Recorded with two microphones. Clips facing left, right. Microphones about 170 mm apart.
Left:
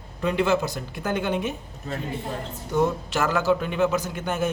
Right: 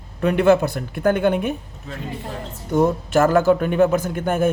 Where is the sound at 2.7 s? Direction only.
50° right (ahead or behind).